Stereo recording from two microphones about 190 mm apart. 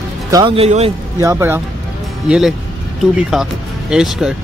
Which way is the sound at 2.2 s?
5° right (ahead or behind).